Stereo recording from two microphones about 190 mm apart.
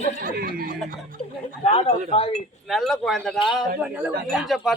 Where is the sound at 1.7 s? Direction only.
30° left (ahead or behind).